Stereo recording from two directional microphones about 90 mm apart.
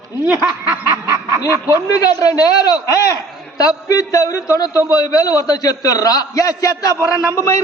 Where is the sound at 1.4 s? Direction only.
40° left (ahead or behind).